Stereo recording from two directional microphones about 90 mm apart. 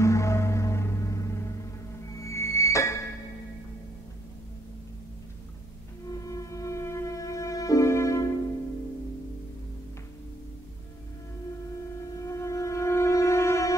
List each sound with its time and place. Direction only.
0.0 s music: 35° left (ahead or behind)
6.0 s music: 40° left (ahead or behind)
12.2 s music: 35° left (ahead or behind)